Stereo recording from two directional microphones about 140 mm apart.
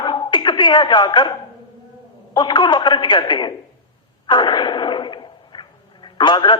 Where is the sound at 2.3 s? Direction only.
35° left (ahead or behind).